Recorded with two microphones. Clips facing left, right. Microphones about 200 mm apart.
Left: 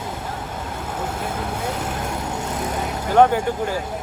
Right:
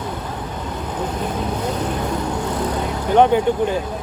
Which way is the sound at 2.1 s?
25° left (ahead or behind).